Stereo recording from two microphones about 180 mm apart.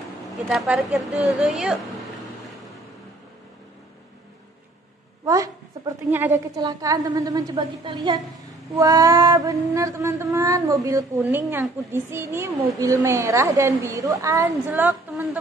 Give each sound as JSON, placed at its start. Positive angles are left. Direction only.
{"t": 0.5, "sound": "speech", "side_deg": 0}
{"t": 5.2, "sound": "a woman's voice", "side_deg": -20}